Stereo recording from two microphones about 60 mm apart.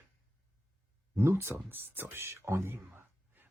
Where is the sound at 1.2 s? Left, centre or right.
Right.